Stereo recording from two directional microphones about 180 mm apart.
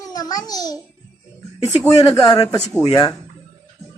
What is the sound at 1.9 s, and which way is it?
A child's voice, 20° left (ahead or behind).